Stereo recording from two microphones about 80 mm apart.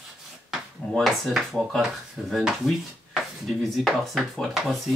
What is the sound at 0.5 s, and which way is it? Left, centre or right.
Speech, centre.